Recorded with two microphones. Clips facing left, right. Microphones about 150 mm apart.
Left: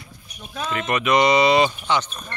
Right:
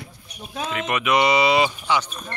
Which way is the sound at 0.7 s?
5° right (ahead or behind).